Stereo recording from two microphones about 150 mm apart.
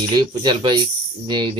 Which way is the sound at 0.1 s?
30° right (ahead or behind).